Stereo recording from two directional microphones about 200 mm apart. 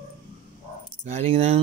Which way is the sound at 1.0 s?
30° right (ahead or behind).